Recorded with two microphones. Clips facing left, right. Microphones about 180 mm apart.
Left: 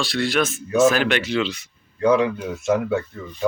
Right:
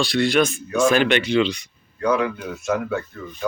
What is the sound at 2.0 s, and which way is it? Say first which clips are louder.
Speech: left 3 dB; 25° left (ahead or behind).